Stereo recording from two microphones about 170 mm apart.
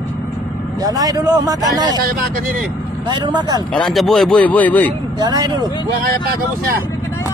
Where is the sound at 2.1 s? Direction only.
60° right (ahead or behind).